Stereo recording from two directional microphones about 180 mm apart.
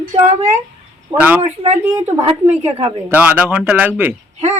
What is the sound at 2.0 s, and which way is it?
Speech, 35° right (ahead or behind).